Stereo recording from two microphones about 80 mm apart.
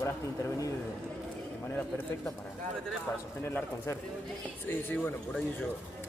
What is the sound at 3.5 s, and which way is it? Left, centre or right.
Speech, left.